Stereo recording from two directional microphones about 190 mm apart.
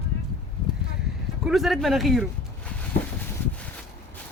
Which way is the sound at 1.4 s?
Centre (ahead or behind).